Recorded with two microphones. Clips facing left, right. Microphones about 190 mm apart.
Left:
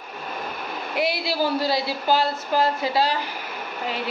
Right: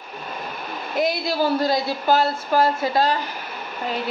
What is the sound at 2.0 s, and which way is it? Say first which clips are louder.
Speech: right 3 dB; 50° right (ahead or behind).